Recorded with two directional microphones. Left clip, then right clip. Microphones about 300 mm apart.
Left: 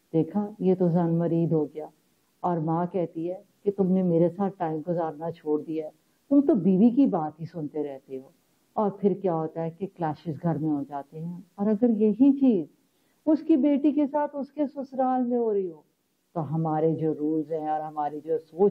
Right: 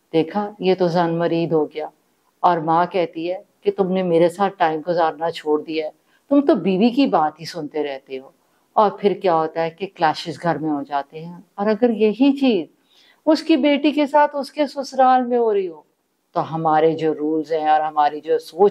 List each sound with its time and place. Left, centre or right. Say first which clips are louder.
0.1 s speech: right 8 dB; centre
17.2 s speech: right 6 dB; centre
17.5 s speech: right 12 dB; centre